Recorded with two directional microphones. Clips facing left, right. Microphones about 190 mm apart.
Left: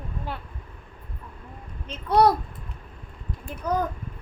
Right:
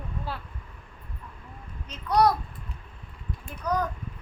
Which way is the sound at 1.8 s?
30° left (ahead or behind).